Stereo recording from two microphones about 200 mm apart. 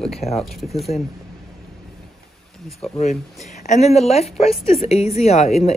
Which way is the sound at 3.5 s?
35° left (ahead or behind).